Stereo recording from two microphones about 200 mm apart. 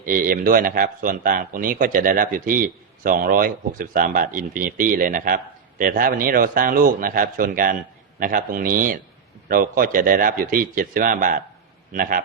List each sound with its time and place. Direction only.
0.0 s a man's voice: 45° right (ahead or behind)